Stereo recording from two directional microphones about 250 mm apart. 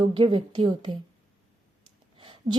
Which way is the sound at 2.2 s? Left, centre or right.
Right.